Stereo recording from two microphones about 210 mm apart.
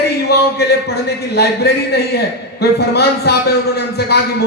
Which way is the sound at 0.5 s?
50° left (ahead or behind).